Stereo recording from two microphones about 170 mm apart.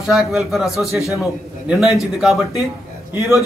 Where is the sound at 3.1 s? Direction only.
15° right (ahead or behind).